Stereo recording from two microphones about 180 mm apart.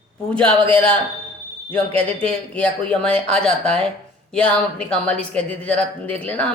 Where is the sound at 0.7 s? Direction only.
5° left (ahead or behind).